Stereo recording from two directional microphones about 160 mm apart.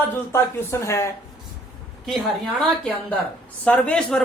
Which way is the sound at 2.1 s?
Centre (ahead or behind).